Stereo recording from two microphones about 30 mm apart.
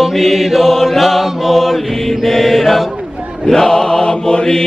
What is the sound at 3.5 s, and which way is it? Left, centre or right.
Chant, centre.